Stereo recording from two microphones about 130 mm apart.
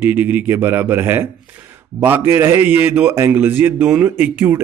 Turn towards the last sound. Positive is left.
turn(degrees=-15)  # may be behind; listen again after turning